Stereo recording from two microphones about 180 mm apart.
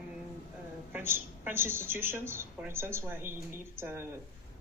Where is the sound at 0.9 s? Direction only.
10° right (ahead or behind).